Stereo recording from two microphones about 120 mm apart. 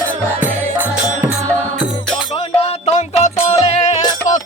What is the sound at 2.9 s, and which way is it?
Music, 65° left (ahead or behind).